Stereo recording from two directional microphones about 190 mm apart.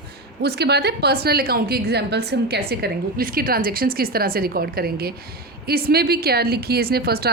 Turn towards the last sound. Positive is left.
turn(degrees=-55)  # may be behind; listen again after turning